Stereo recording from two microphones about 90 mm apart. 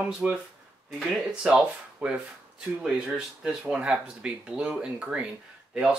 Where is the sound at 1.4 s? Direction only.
10° right (ahead or behind).